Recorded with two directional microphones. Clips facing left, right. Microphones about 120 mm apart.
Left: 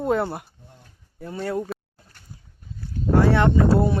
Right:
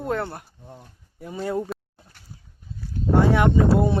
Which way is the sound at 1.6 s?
5° right (ahead or behind).